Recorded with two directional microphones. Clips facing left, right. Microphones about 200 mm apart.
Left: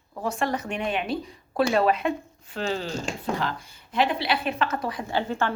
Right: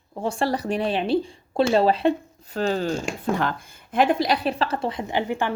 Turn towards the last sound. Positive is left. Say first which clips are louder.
# right 2 dB
turn(degrees=-15)  # may be behind; listen again after turning